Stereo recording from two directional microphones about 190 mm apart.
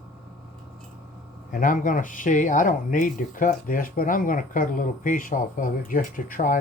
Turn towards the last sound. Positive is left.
turn(degrees=45)  # may be behind; listen again after turning